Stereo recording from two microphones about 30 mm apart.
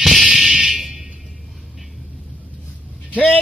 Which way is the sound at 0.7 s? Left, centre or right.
Centre.